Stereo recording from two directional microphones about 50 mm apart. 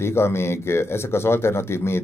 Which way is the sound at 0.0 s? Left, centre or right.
Left.